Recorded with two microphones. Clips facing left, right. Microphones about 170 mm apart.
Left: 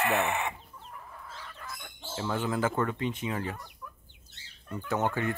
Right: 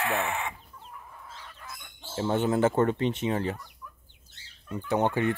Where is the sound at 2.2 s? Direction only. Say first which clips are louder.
Right 5 dB; 30° right (ahead or behind).